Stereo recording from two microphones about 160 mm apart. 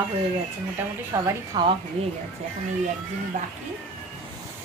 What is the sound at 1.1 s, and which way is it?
Speech, 25° right (ahead or behind).